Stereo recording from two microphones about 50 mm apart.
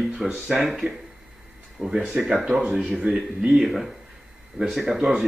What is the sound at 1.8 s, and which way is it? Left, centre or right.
Speech, centre.